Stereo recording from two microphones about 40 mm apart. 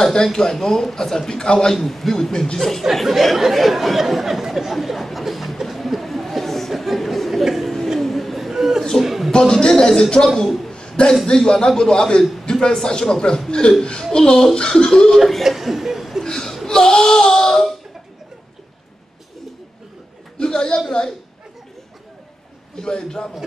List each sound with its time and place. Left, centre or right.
0.0 s a man's voice: centre
2.8 s chatter: centre
8.0 s a sound: centre
9.3 s a man's voice: centre
10.9 s a sound: centre
11.2 s a man's voice: centre
15.1 s chuckle: centre
16.3 s chuckle: centre
16.6 s speech: centre
20.3 s a sound: centre
22.8 s a man's voice: centre